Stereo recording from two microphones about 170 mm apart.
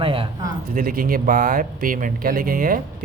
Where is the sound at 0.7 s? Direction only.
55° right (ahead or behind).